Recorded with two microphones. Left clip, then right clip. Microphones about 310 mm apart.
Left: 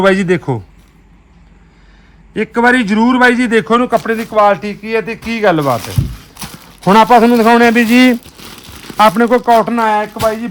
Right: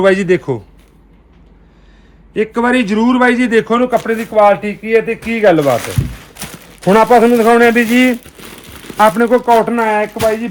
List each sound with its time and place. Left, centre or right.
0.0 s a man's voice: left
2.3 s a man's voice: left
6.8 s a man's voice: left